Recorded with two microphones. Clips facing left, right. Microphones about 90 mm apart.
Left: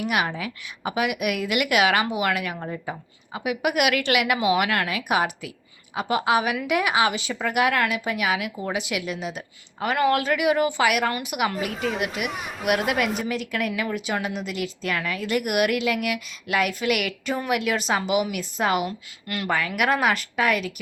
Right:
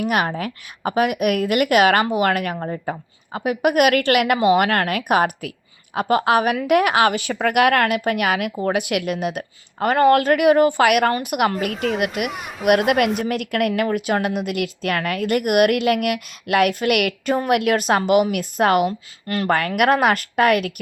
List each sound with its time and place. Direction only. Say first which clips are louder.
0.0 s a woman's voice: right 4 dB; 45° right (ahead or behind)
18.9 s speech: right 6 dB; 35° right (ahead or behind)
19.5 s speech: right 5 dB; 55° right (ahead or behind)